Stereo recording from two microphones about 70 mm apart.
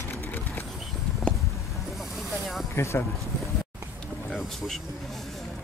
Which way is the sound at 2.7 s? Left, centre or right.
Left.